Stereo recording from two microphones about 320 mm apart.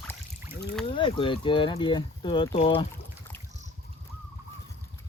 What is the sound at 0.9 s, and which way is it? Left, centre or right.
Speech, centre.